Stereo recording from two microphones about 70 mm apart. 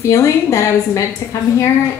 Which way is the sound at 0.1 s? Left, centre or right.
Left.